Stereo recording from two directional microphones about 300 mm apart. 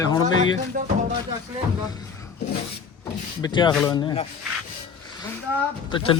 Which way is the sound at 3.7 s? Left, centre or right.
Centre.